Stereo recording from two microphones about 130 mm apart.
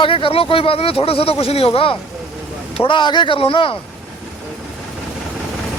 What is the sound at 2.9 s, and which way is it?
Speech, 35° left (ahead or behind).